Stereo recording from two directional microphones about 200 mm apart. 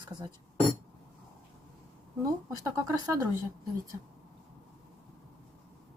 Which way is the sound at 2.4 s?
15° right (ahead or behind).